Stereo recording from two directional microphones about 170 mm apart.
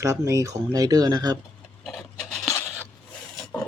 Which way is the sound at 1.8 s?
5° left (ahead or behind).